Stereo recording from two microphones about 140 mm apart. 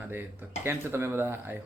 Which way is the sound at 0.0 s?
15° right (ahead or behind).